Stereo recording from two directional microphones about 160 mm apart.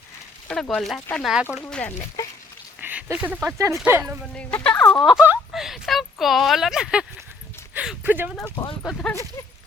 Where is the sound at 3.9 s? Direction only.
15° right (ahead or behind).